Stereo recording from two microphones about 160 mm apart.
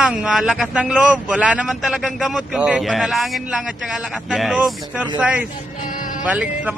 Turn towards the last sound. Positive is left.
turn(degrees=-10)  # may be behind; listen again after turning